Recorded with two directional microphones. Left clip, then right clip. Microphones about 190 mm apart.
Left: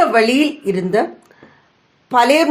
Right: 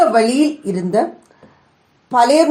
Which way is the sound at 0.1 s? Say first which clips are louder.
Even; 25° left (ahead or behind).